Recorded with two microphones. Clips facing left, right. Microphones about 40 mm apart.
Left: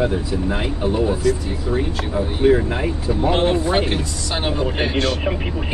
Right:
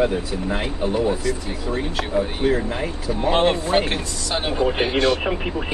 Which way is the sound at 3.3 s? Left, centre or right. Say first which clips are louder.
Right 1 dB; right.